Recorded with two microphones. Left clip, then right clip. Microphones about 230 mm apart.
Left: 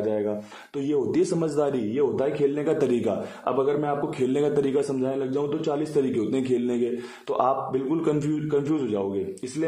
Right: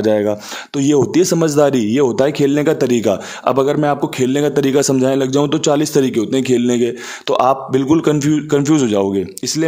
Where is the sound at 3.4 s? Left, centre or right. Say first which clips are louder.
Right 10 dB; right.